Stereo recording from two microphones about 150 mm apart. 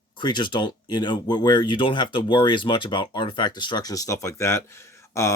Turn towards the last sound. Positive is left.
turn(degrees=20)  # may be behind; listen again after turning